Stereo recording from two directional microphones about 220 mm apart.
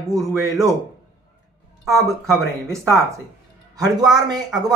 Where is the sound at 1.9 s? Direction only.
15° right (ahead or behind).